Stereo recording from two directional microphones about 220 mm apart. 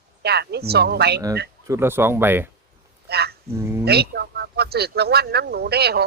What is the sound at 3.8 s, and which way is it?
Speech, 45° right (ahead or behind).